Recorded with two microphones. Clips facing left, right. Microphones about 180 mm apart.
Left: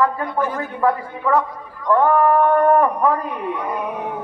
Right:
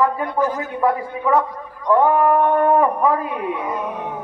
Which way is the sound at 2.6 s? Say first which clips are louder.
Left 1 dB; 5° right (ahead or behind).